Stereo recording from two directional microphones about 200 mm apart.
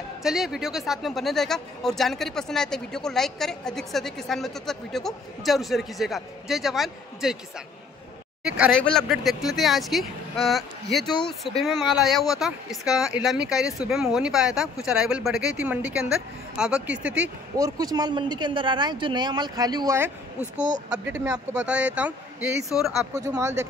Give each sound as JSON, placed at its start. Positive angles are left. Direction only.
{"t": 0.2, "sound": "speech", "side_deg": 0}
{"t": 17.6, "sound": "speech", "side_deg": -15}
{"t": 23.1, "sound": "speech", "side_deg": -15}